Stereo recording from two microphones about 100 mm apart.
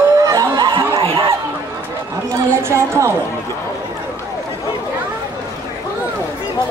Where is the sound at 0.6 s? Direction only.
50° right (ahead or behind).